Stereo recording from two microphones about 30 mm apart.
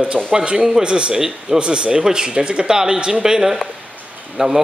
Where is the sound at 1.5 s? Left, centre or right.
Right.